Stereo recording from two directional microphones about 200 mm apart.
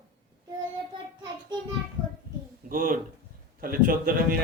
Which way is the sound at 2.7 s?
45° right (ahead or behind).